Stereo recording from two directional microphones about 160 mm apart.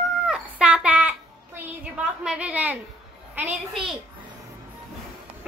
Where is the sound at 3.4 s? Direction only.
35° right (ahead or behind).